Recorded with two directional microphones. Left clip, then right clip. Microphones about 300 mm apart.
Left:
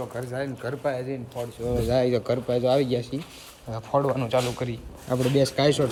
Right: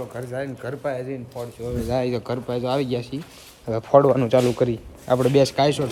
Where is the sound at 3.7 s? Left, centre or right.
Right.